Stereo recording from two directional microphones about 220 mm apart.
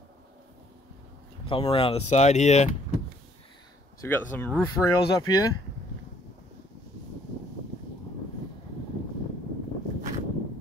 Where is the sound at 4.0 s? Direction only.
10° left (ahead or behind).